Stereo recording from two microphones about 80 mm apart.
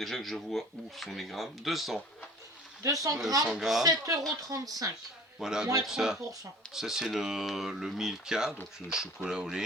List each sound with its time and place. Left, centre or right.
0.0 s speech: centre
2.8 s speech: right
3.4 s speech: centre
3.8 s speech: right
5.4 s speech: centre